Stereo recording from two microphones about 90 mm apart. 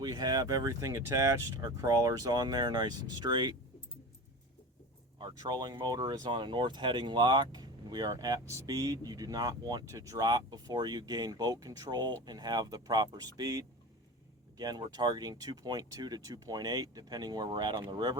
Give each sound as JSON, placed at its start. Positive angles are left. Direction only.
{"t": 0.0, "sound": "speech", "side_deg": -45}
{"t": 5.4, "sound": "speech", "side_deg": -50}